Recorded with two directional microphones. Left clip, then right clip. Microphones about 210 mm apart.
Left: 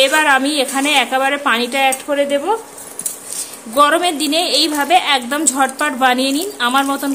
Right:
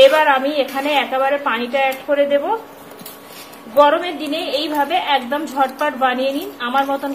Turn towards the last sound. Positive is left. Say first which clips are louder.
# left 3 dB
turn(degrees=55)  # may be behind; listen again after turning